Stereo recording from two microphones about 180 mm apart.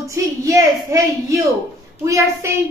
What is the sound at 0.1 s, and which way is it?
Speech, 15° right (ahead or behind).